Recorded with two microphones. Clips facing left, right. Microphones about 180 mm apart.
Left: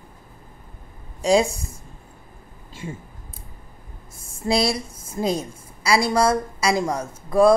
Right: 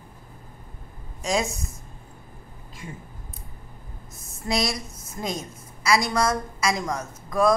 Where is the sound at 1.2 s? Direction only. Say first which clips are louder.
Left 7 dB; 30° left (ahead or behind).